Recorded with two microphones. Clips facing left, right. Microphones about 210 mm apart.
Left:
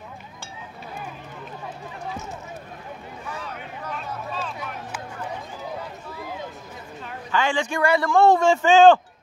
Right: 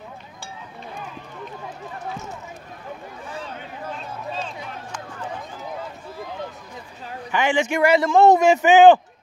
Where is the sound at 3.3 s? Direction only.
30° right (ahead or behind).